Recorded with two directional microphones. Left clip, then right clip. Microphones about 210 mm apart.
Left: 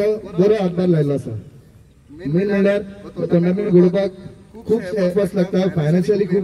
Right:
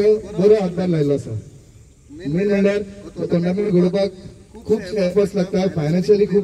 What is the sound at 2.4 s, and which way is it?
A man's voice, 50° left (ahead or behind).